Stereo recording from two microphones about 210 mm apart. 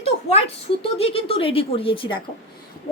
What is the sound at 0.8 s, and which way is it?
A woman's voice, 30° left (ahead or behind).